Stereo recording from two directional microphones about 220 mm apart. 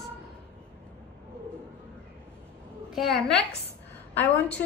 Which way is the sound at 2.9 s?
Centre (ahead or behind).